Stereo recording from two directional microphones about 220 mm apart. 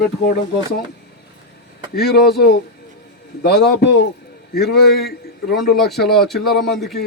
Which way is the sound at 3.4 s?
45° left (ahead or behind).